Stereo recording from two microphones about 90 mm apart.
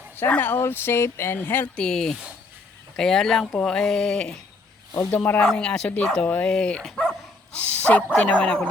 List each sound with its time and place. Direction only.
0.2 s speech: 20° left (ahead or behind)
1.7 s speech: 10° left (ahead or behind)
5.1 s speech: 20° left (ahead or behind)
5.4 s speech: 10° left (ahead or behind)
6.2 s speech: 15° left (ahead or behind)